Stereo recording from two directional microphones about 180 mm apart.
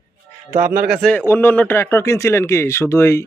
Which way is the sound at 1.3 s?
10° left (ahead or behind).